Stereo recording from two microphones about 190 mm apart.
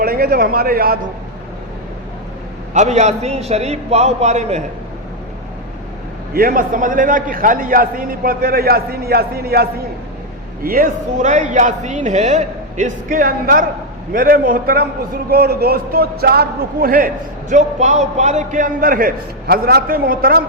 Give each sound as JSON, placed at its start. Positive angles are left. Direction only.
{"t": 0.0, "sound": "speech", "side_deg": -55}
{"t": 2.7, "sound": "a man's voice", "side_deg": -35}
{"t": 6.3, "sound": "a man's voice", "side_deg": -50}
{"t": 17.5, "sound": "a man's voice", "side_deg": -40}